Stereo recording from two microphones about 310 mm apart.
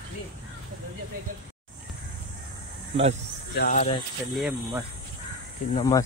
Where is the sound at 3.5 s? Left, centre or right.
Left.